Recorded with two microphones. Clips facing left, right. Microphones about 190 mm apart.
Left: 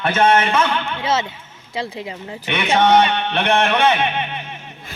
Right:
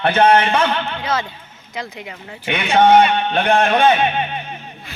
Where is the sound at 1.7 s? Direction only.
30° left (ahead or behind).